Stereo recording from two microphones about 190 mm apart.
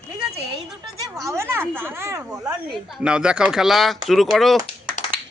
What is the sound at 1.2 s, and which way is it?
Speech, 15° right (ahead or behind).